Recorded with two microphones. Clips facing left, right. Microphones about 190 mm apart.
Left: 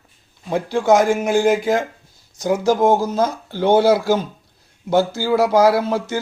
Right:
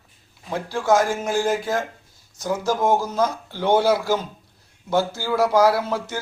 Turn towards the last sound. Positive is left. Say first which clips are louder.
# left 4 dB
turn(degrees=15)  # may be behind; listen again after turning